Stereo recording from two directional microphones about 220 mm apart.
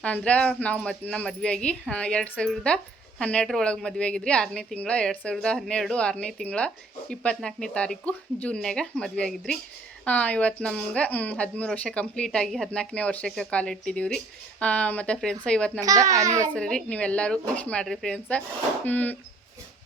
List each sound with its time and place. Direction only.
0.0 s speech: 5° left (ahead or behind)
15.8 s a child's voice: 15° right (ahead or behind)
16.6 s speech: 5° left (ahead or behind)